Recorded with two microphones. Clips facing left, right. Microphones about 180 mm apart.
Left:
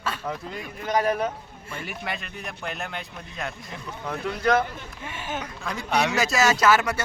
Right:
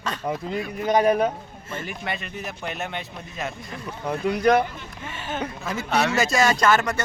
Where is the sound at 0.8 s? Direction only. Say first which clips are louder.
Right 4 dB; 20° right (ahead or behind).